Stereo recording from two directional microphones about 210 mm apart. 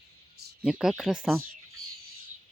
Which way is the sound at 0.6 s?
Centre (ahead or behind).